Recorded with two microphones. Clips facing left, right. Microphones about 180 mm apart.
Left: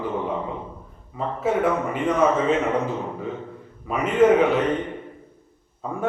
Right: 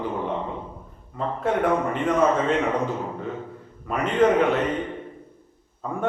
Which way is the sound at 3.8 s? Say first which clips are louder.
Left 2 dB; 5° left (ahead or behind).